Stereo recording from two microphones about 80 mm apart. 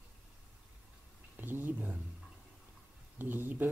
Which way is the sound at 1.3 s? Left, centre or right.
Right.